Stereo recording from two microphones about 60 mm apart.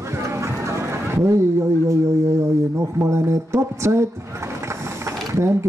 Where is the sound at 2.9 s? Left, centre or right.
Right.